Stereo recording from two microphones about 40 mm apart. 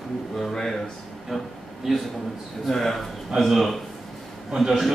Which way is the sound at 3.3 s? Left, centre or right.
Centre.